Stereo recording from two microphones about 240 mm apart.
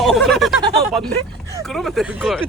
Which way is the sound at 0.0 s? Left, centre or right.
Centre.